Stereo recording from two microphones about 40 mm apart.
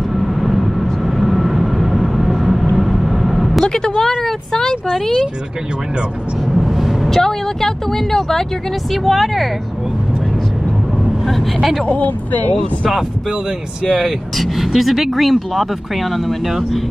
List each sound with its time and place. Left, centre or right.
0.1 s vehicle: centre
3.6 s vehicle: centre
4.2 s a sound: centre
4.9 s speech: centre
6.5 s vehicle: centre
7.1 s speech: centre
11.2 s speech: centre
12.0 s speech: left
14.0 s speech: centre